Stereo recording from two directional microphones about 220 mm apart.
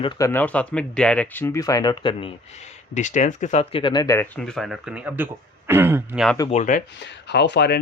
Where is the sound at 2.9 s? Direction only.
35° left (ahead or behind); by 6.4 s 5° right (ahead or behind).